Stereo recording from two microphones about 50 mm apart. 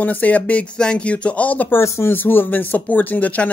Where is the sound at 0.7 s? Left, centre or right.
Centre.